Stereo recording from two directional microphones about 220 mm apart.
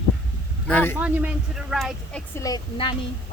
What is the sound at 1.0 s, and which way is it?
A man's voice, 5° right (ahead or behind).